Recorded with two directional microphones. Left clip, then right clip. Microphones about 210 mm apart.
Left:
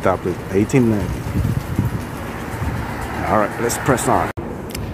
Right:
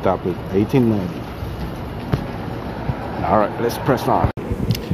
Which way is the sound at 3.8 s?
20° left (ahead or behind).